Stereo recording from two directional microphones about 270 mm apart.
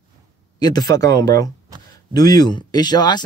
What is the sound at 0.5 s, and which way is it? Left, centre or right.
Speech, centre.